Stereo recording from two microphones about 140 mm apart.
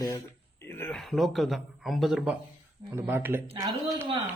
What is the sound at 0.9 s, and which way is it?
Speech, centre (ahead or behind).